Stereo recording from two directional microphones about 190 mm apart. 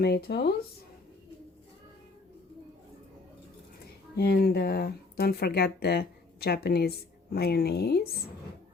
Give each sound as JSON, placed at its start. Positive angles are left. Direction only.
{"t": 0.0, "sound": "speech", "side_deg": 55}
{"t": 4.2, "sound": "speech", "side_deg": 55}